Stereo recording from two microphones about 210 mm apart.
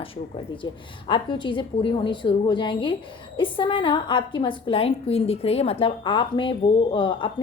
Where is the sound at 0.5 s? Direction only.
25° left (ahead or behind).